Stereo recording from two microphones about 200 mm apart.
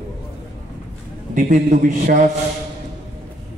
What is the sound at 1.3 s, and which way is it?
Mantra, 40° right (ahead or behind).